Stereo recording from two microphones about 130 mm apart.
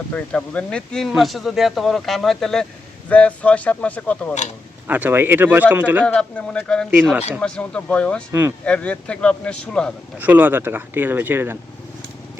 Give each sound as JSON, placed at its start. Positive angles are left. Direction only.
{"t": 0.1, "sound": "speech", "side_deg": 10}
{"t": 4.9, "sound": "speech", "side_deg": -15}
{"t": 6.1, "sound": "speech", "side_deg": 10}
{"t": 8.3, "sound": "speech", "side_deg": -20}
{"t": 8.6, "sound": "speech", "side_deg": 10}
{"t": 10.2, "sound": "speech", "side_deg": -15}